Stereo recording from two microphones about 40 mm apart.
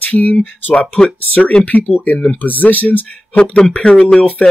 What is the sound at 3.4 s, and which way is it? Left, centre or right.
Speech, left.